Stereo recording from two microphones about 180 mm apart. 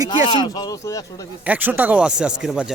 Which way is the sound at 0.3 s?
25° left (ahead or behind).